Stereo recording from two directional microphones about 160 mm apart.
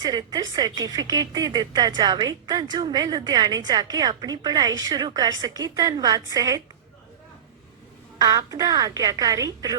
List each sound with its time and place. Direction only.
0.0 s speech: 25° right (ahead or behind)
8.2 s speech: 20° right (ahead or behind)